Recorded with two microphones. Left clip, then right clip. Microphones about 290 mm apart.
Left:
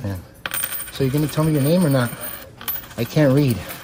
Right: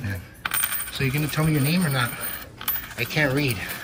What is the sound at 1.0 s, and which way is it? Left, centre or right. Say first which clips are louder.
Speech: left 5 dB; centre.